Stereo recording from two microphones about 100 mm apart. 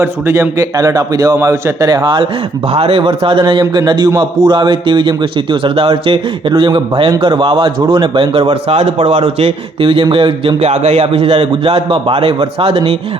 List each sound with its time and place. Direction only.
0.0 s a man's voice: 30° right (ahead or behind)
2.7 s a man's voice: 75° right (ahead or behind); by 3.6 s 60° right (ahead or behind)
3.6 s a man's voice: 50° right (ahead or behind); by 10.5 s 65° right (ahead or behind)
10.6 s a man's voice: 90° right